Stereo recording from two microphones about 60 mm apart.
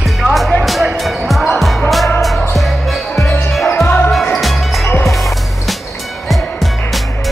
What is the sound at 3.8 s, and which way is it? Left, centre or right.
Basketball bounce, left.